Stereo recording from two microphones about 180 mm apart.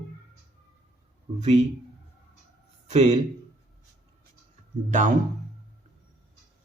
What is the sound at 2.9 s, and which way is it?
Speech, 35° right (ahead or behind).